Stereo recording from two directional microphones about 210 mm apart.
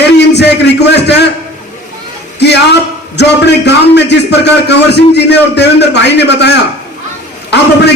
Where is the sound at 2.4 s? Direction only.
55° left (ahead or behind).